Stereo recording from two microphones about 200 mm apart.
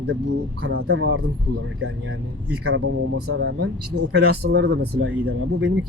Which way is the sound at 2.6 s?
75° right (ahead or behind).